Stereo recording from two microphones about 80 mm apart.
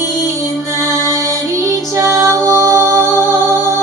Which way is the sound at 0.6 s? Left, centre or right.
Right.